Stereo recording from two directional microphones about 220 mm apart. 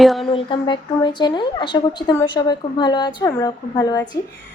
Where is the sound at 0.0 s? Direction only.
Centre (ahead or behind).